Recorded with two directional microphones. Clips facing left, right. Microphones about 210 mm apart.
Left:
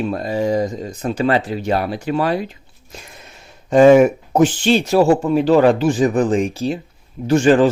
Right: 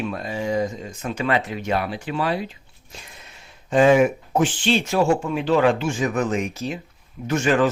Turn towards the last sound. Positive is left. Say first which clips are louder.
# left 7 dB
turn(degrees=30)  # may be behind; listen again after turning